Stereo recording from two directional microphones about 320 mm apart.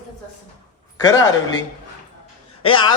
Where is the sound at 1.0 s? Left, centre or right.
Centre.